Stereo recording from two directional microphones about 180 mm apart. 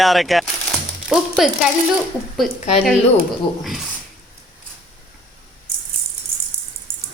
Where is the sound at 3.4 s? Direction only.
25° left (ahead or behind).